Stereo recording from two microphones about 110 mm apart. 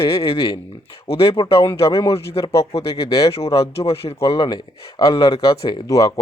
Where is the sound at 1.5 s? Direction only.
25° left (ahead or behind).